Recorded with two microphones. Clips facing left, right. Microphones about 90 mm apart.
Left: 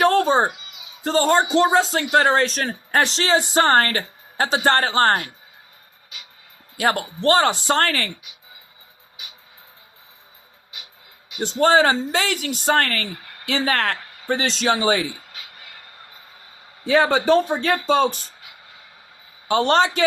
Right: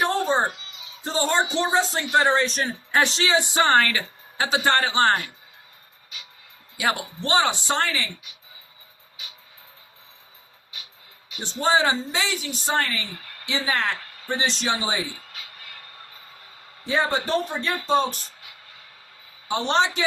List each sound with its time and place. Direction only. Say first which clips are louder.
0.0 s children playing: left 6 dB; 70° left (ahead or behind)
0.5 s a sound: even; 15° left (ahead or behind)
1.0 s a woman's voice: left 5 dB; 50° left (ahead or behind)
2.9 s a woman's voice: left 2 dB; 40° left (ahead or behind)
6.7 s a woman's voice: left 4 dB; 40° left (ahead or behind)
11.4 s speech: left 5 dB; 65° left (ahead or behind)
16.8 s speech: left 7 dB; 70° left (ahead or behind); by 18.1 s 90° left
19.5 s a man's voice: left 7 dB; 75° left (ahead or behind)
19.7 s a woman's voice: left 3 dB; 50° left (ahead or behind)